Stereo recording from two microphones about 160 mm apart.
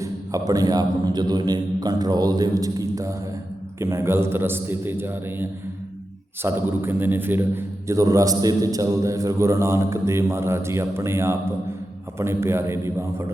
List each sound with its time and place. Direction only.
0.0 s a man's voice: 20° right (ahead or behind)